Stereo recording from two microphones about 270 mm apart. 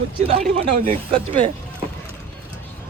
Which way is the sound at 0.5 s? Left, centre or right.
Right.